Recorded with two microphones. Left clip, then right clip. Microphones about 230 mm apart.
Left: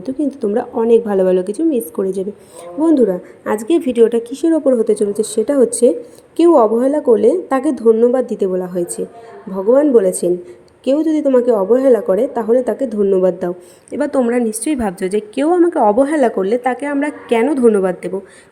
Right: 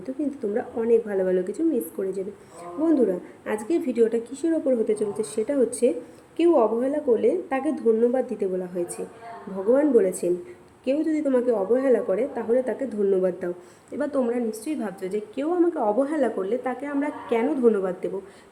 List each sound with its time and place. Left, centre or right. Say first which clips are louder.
0.0 s a woman's voice: left 9 dB; left